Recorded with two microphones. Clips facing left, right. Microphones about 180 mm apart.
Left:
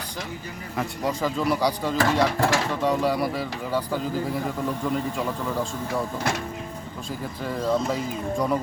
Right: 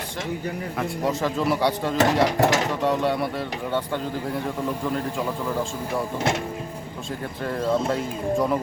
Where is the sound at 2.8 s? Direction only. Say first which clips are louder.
Even; centre (ahead or behind).